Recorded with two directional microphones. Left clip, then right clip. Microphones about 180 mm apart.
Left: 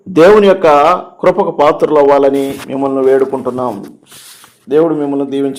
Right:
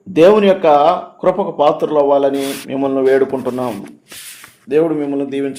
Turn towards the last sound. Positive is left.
turn(degrees=15)  # may be behind; listen again after turning